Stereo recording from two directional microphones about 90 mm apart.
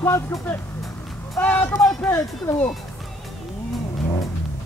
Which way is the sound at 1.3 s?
15° left (ahead or behind).